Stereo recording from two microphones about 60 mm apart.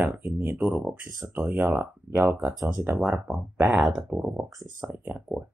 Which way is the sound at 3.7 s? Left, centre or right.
Centre.